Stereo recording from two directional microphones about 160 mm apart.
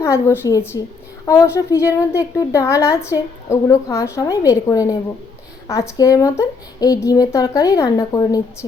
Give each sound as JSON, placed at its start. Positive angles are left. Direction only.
{"t": 0.0, "sound": "a woman's voice", "side_deg": 20}